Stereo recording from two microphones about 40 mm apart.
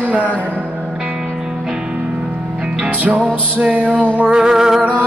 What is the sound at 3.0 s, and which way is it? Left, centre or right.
Music, right.